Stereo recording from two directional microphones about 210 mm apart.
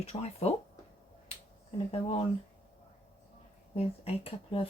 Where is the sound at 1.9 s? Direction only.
30° left (ahead or behind).